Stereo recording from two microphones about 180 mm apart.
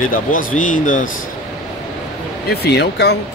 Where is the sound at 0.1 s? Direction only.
50° left (ahead or behind).